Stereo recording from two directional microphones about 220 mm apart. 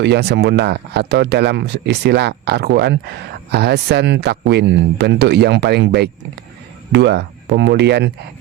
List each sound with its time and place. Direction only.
0.0 s speech: 50° right (ahead or behind)